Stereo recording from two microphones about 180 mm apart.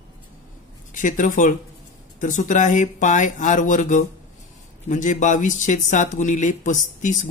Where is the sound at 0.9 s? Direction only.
45° left (ahead or behind).